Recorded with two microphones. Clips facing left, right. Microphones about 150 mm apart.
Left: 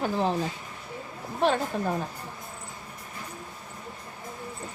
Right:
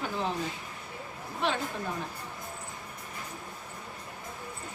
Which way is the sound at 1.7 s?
45° left (ahead or behind).